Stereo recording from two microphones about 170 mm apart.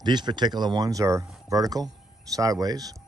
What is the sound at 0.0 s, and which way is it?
Speech, 25° right (ahead or behind).